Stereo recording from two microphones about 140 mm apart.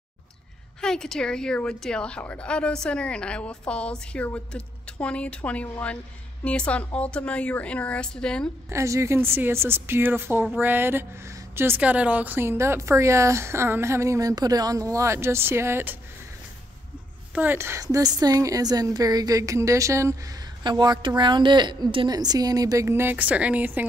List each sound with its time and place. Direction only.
0.7 s speech: 5° left (ahead or behind)
8.6 s a woman's voice: 20° right (ahead or behind)
17.3 s speech: 15° right (ahead or behind)
20.6 s speech: 30° right (ahead or behind); by 23.9 s 15° right (ahead or behind)